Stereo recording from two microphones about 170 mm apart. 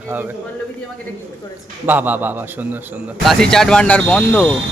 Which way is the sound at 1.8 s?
10° right (ahead or behind).